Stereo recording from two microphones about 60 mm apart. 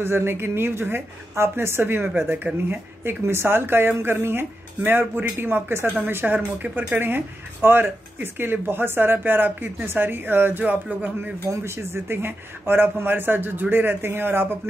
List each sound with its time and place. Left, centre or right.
0.0 s a woman's voice: right
11.5 s a woman's voice: right